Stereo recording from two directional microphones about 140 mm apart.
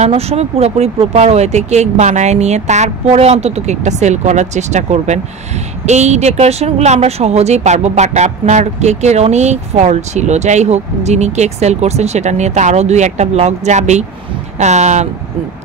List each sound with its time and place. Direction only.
0.0 s speech: 50° right (ahead or behind)